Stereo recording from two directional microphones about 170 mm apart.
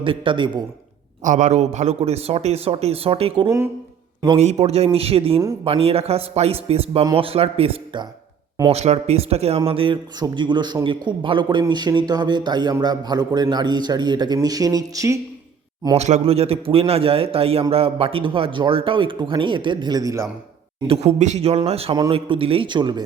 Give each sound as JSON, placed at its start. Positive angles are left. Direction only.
{"t": 0.0, "sound": "a man's voice", "side_deg": -30}
{"t": 1.2, "sound": "a man's voice", "side_deg": -45}
{"t": 4.6, "sound": "a man's voice", "side_deg": -35}
{"t": 16.0, "sound": "a man's voice", "side_deg": -40}
{"t": 20.8, "sound": "a man's voice", "side_deg": -35}